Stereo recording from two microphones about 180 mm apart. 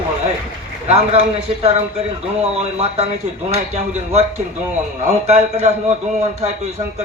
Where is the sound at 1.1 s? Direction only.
35° right (ahead or behind).